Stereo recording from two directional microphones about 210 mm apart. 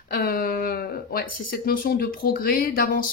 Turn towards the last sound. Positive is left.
turn(degrees=40)  # may be behind; listen again after turning